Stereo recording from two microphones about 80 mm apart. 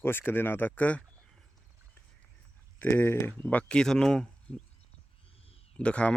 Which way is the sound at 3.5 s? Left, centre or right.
Centre.